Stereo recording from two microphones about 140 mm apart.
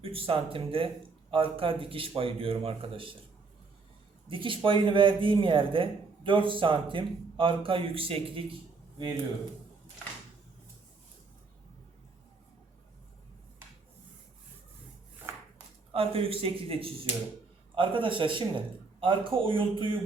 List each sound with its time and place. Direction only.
0.0 s a man's voice: 40° right (ahead or behind)
4.3 s a man's voice: 40° right (ahead or behind)
15.9 s a man's voice: 40° right (ahead or behind)